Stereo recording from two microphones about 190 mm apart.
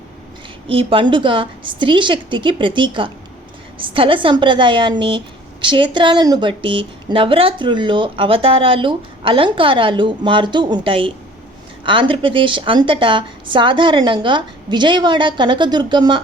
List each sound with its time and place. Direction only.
0.7 s a woman's voice: 30° right (ahead or behind)